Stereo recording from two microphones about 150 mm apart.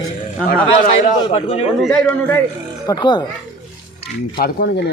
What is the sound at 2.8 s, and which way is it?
Speech, 30° left (ahead or behind).